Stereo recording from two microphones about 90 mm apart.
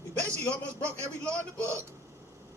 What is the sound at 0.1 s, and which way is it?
A man's voice, 15° left (ahead or behind).